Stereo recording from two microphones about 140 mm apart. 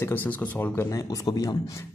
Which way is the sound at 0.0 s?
15° left (ahead or behind).